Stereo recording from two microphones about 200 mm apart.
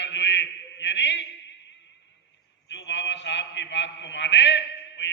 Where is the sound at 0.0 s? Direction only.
60° left (ahead or behind).